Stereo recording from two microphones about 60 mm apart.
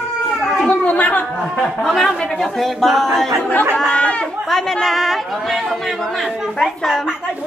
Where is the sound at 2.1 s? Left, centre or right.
Centre.